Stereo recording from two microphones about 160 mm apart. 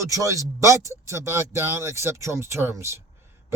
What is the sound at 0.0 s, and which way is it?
Speech, 20° right (ahead or behind).